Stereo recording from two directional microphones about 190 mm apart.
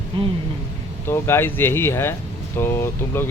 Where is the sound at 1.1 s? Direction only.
10° left (ahead or behind).